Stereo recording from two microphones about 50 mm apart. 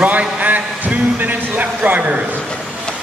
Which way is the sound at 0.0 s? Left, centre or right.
Right.